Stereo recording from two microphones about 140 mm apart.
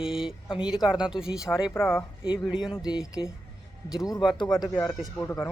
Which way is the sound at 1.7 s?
15° left (ahead or behind).